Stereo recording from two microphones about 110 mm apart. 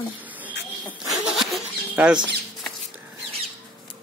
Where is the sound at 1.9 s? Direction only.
10° right (ahead or behind).